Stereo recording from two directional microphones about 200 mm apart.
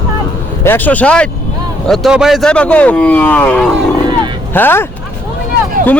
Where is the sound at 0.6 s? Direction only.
10° left (ahead or behind).